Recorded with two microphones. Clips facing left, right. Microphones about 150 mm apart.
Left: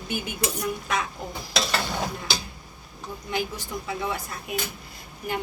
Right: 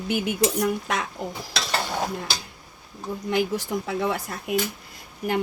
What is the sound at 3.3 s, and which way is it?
Speech, 75° right (ahead or behind).